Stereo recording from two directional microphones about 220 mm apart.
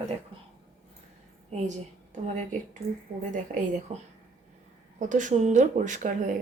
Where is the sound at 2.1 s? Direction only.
35° right (ahead or behind).